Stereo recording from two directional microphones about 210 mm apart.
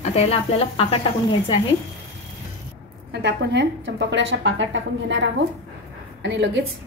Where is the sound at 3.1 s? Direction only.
55° right (ahead or behind).